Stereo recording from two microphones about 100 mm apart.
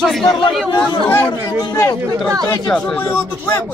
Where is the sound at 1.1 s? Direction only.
15° left (ahead or behind).